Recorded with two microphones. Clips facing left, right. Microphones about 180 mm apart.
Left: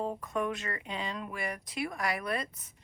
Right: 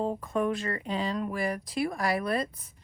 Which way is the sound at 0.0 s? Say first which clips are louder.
Right 4 dB; 30° right (ahead or behind).